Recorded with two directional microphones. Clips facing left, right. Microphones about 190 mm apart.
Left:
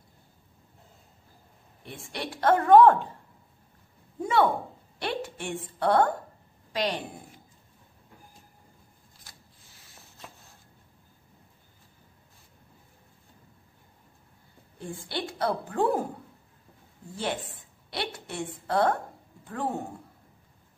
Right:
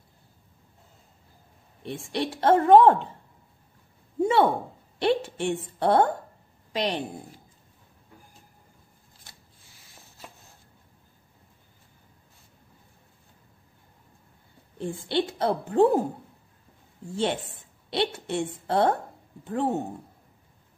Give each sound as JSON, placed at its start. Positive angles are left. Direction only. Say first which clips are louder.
{"t": 1.9, "sound": "a woman's voice", "louder": "right 7 dB", "side_deg": -25}
{"t": 4.2, "sound": "a sound", "louder": "right 3 dB", "side_deg": -25}
{"t": 4.9, "sound": "a woman's voice", "louder": "right 8 dB", "side_deg": -25}
{"t": 14.8, "sound": "a woman's voice", "louder": "right 8 dB", "side_deg": -25}
{"t": 17.0, "sound": "a woman's voice", "louder": "right 5 dB", "side_deg": -25}